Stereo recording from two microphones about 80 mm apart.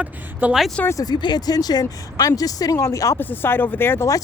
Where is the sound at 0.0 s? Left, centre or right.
Centre.